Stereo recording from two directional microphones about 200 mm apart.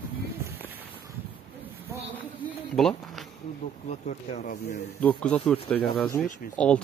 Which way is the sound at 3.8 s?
35° left (ahead or behind).